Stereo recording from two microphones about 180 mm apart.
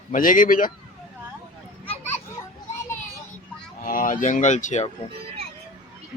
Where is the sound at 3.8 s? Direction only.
50° left (ahead or behind).